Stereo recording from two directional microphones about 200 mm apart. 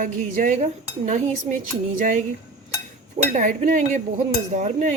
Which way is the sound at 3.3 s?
40° right (ahead or behind).